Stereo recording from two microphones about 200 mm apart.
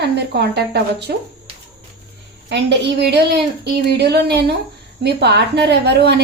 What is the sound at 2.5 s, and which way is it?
A woman's voice, 60° right (ahead or behind).